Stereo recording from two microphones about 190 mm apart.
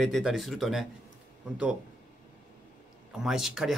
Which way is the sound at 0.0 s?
Centre (ahead or behind).